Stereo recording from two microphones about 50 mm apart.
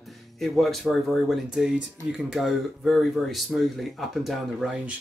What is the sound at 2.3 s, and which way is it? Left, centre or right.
Speech, centre.